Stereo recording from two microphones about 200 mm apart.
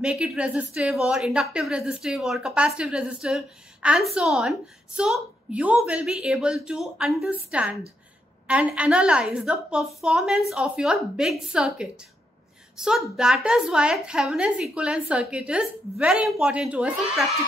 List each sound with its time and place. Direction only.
0.0 s a woman's voice: 5° right (ahead or behind)